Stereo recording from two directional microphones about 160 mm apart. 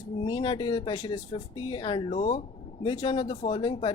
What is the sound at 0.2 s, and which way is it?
Speech, 30° left (ahead or behind).